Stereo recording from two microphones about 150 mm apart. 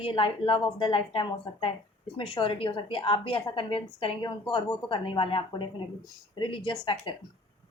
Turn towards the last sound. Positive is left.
turn(degrees=30)  # may be behind; listen again after turning